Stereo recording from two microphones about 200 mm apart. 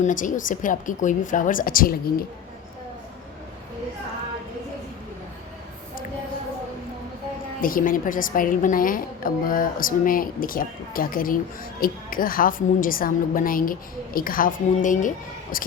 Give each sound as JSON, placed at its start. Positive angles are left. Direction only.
{"t": 0.0, "sound": "a woman's voice", "side_deg": 40}
{"t": 7.6, "sound": "a woman's voice", "side_deg": 45}